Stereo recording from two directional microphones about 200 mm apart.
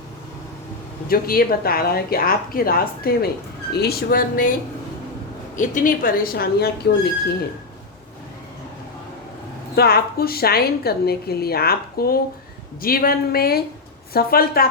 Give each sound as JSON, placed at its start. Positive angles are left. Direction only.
{"t": 1.0, "sound": "a woman's voice", "side_deg": 50}
{"t": 5.5, "sound": "a woman's voice", "side_deg": 40}
{"t": 9.7, "sound": "a woman's voice", "side_deg": 50}